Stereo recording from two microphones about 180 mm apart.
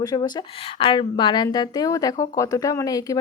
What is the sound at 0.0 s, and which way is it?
A woman's voice, 20° left (ahead or behind).